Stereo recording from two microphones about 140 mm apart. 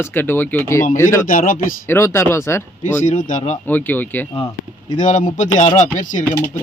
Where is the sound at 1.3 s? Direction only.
75° left (ahead or behind).